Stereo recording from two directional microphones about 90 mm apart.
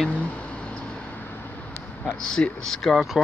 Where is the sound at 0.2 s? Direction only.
15° left (ahead or behind).